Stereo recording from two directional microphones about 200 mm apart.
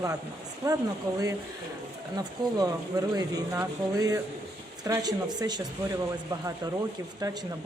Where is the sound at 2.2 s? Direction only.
20° right (ahead or behind).